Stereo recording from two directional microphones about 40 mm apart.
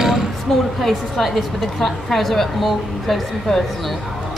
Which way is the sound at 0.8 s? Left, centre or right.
Centre.